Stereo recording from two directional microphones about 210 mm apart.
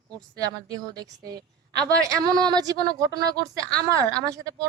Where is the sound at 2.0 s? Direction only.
15° right (ahead or behind).